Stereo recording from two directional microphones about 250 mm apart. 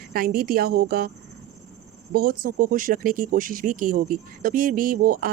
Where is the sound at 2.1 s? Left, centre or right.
Right.